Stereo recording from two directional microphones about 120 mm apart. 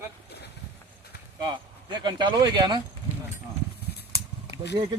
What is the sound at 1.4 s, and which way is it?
Speech, 40° right (ahead or behind).